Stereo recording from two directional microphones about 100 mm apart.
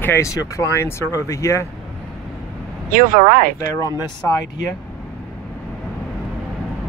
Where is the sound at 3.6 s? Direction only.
35° left (ahead or behind).